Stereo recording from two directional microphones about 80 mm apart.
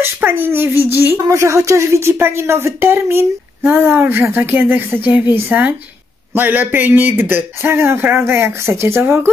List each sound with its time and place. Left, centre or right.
0.0 s a man's voice: right